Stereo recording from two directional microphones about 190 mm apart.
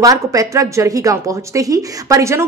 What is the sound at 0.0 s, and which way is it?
Speech, 20° right (ahead or behind).